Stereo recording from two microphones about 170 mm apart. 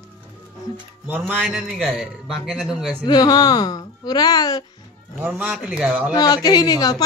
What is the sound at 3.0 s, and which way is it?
Speech, 25° left (ahead or behind).